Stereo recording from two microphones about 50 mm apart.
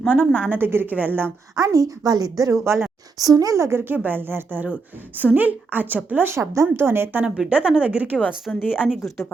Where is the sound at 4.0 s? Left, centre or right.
Right.